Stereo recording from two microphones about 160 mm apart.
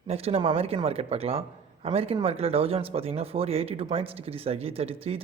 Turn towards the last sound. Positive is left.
turn(degrees=-35)  # may be behind; listen again after turning